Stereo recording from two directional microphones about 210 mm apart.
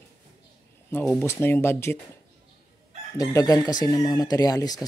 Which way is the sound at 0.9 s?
5° left (ahead or behind).